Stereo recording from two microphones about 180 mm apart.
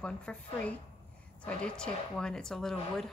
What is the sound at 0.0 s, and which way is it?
Speech, 5° left (ahead or behind).